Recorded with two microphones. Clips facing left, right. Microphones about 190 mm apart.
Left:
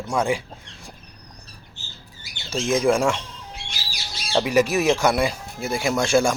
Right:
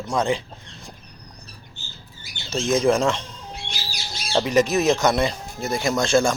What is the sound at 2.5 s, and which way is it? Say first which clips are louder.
Speech: right 1 dB; 10° left (ahead or behind).